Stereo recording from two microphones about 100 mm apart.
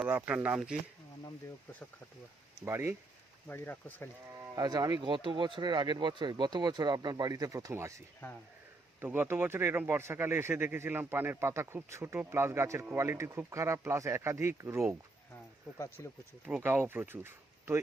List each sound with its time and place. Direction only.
0.3 s speech: 15° right (ahead or behind)
2.6 s speech: 30° right (ahead or behind)
3.4 s speech: 20° left (ahead or behind)
4.5 s speech: 40° right (ahead or behind)
16.6 s speech: 20° right (ahead or behind)